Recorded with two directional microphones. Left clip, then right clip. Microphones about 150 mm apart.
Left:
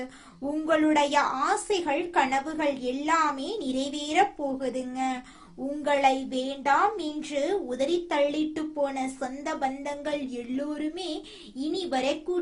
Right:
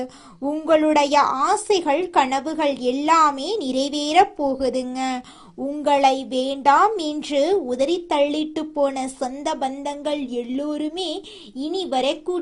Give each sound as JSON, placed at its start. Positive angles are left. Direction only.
{"t": 0.6, "sound": "a woman's voice", "side_deg": -45}
{"t": 5.8, "sound": "a woman's voice", "side_deg": -45}